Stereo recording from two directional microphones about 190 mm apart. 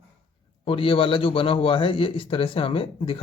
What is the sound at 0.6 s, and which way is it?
A man's voice, 30° left (ahead or behind).